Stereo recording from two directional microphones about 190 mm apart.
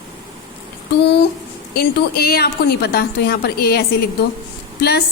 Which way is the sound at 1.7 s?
55° left (ahead or behind).